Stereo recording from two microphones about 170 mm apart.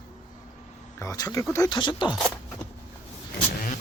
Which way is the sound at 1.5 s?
25° left (ahead or behind).